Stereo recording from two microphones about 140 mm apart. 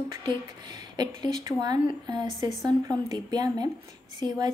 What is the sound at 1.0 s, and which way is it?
A woman's voice, 30° right (ahead or behind).